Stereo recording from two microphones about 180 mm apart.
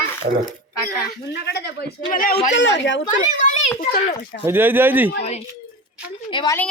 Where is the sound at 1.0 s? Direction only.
65° left (ahead or behind).